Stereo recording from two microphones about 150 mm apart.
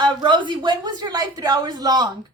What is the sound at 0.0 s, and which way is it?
A woman's voice, 30° right (ahead or behind).